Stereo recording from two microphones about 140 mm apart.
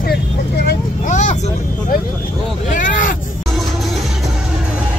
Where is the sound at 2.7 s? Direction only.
70° left (ahead or behind).